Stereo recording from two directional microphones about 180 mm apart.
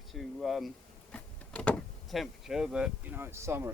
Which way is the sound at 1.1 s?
5° left (ahead or behind).